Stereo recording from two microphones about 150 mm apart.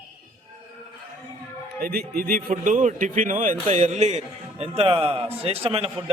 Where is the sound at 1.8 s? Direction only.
80° right; by 3.5 s 60° right (ahead or behind).